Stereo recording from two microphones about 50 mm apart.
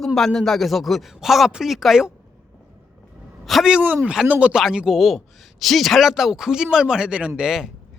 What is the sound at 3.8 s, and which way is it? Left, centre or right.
Speech, right.